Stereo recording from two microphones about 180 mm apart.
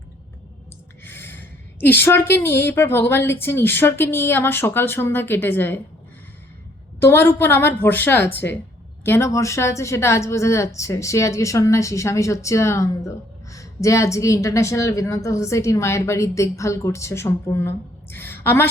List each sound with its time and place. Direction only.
1.0 s speech: 10° left (ahead or behind)
7.0 s speech: 10° left (ahead or behind)